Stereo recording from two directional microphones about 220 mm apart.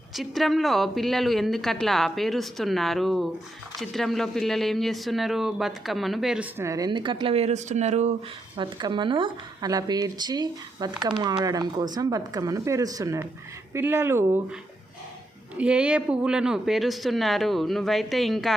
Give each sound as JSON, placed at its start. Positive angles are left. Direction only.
{"t": 0.1, "sound": "speech", "side_deg": 0}
{"t": 8.5, "sound": "speech", "side_deg": -20}